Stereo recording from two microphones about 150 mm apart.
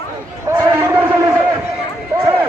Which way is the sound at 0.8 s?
15° right (ahead or behind).